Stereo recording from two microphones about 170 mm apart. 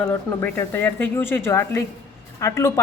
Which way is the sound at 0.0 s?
15° left (ahead or behind).